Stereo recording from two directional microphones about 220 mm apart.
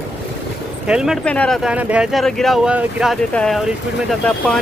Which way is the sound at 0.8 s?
5° right (ahead or behind).